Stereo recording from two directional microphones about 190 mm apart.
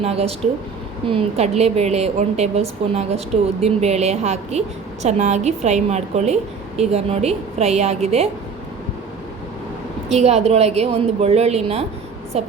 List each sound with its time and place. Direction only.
0.0 s a woman's voice: 35° right (ahead or behind)
10.1 s a woman's voice: 35° right (ahead or behind)